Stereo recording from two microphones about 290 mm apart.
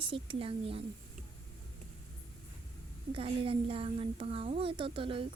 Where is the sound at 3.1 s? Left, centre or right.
Centre.